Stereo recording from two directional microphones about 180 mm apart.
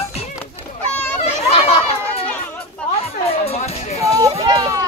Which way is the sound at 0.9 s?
10° left (ahead or behind).